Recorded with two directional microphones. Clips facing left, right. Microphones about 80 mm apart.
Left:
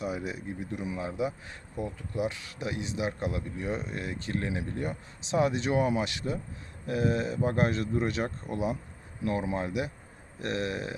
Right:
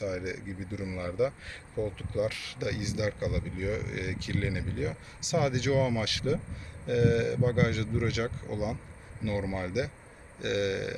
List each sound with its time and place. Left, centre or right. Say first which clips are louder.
0.0 s speech: even; left
0.9 s speech: right 4 dB; left